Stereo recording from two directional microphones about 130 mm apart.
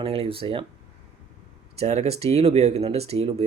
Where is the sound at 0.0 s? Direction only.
45° right (ahead or behind).